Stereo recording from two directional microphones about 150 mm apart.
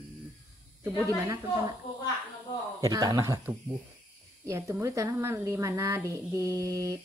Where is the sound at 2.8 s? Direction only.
25° right (ahead or behind).